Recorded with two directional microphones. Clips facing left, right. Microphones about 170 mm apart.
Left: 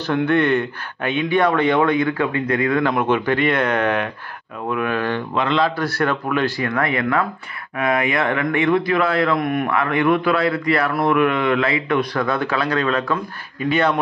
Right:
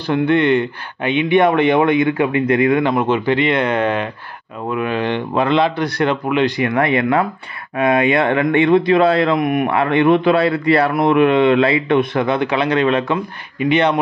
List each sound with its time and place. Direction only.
0.0 s a man's voice: 15° right (ahead or behind)
2.9 s a man's voice: 5° right (ahead or behind)
4.9 s speech: 20° right (ahead or behind)
5.3 s speech: 30° right (ahead or behind)